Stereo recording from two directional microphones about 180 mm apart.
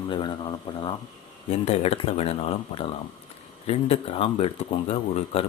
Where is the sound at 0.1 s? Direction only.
25° left (ahead or behind).